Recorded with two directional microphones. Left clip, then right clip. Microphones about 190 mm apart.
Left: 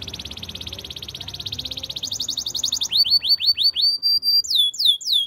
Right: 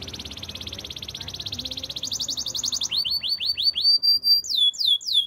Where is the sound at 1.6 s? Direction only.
15° left (ahead or behind).